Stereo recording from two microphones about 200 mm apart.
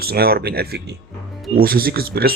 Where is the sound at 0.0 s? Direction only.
50° right (ahead or behind).